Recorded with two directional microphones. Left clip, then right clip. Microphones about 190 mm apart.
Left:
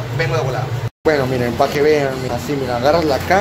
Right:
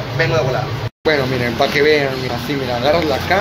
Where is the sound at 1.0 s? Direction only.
15° left (ahead or behind).